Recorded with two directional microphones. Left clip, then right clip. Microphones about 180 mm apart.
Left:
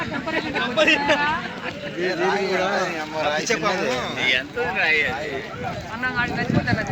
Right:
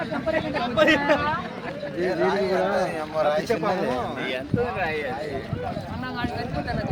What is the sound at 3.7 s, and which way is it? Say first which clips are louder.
Speech: left 2 dB; 40° right (ahead or behind).